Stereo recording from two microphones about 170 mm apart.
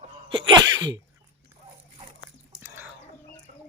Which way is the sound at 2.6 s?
10° right (ahead or behind).